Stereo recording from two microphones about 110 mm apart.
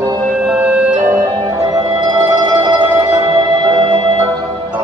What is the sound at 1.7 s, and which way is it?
Music, 40° right (ahead or behind).